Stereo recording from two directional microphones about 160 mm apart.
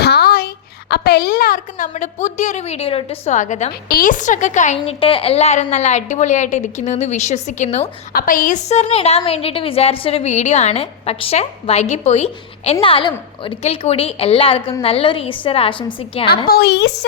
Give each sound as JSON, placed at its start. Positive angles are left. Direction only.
{"t": 0.0, "sound": "a woman's voice", "side_deg": 85}
{"t": 3.8, "sound": "a woman's voice", "side_deg": 65}
{"t": 8.1, "sound": "a woman's voice", "side_deg": 60}
{"t": 16.5, "sound": "a woman's voice", "side_deg": 85}